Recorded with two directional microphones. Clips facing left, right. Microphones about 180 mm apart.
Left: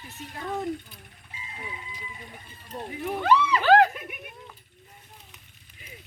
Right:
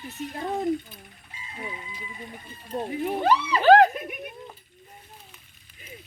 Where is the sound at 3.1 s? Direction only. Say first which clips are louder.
Right 3 dB; 20° right (ahead or behind).